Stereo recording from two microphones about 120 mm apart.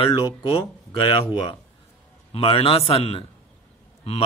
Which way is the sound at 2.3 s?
50° left (ahead or behind).